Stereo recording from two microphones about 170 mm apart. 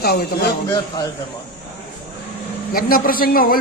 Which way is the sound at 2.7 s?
60° left (ahead or behind).